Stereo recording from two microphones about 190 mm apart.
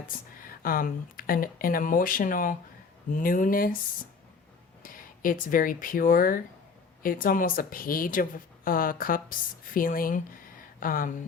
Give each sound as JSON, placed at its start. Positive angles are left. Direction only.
{"t": 0.6, "sound": "speech", "side_deg": 50}
{"t": 4.8, "sound": "speech", "side_deg": 45}